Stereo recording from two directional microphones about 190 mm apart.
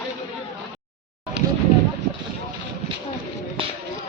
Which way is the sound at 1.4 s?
60° right (ahead or behind).